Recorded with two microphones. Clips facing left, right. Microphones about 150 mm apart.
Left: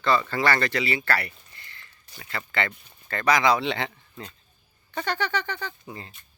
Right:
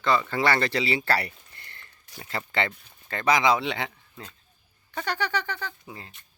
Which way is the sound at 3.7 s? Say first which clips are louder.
Left 2 dB; 10° right (ahead or behind).